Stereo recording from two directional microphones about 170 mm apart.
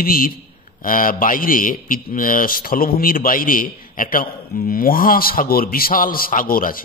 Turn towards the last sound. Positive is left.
turn(degrees=55)  # may be behind; listen again after turning